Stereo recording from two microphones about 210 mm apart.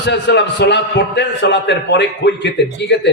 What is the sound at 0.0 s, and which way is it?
A man's voice, 55° left (ahead or behind).